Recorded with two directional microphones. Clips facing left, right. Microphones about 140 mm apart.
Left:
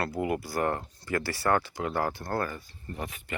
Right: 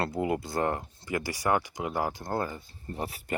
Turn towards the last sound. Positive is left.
turn(degrees=-35)  # may be behind; listen again after turning